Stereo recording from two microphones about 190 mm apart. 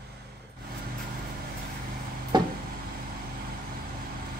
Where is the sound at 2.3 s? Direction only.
20° right (ahead or behind).